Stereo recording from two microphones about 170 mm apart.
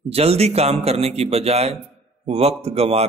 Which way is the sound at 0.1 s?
35° right (ahead or behind).